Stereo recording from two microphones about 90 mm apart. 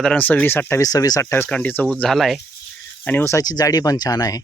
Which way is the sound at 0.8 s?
45° left (ahead or behind).